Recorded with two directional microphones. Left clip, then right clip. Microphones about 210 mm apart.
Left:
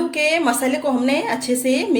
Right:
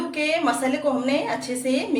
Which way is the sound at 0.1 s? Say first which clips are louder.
Left 2 dB; 50° left (ahead or behind).